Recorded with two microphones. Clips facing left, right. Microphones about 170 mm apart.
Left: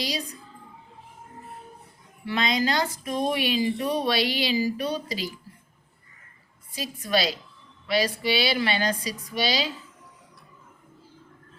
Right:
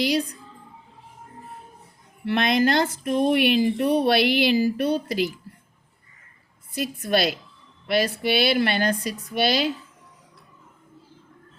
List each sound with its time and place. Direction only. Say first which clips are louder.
0.0 s speech: right 8 dB; 60° right (ahead or behind)
2.2 s speech: right 5 dB; 60° right (ahead or behind)
6.7 s speech: right 3 dB; 55° right (ahead or behind)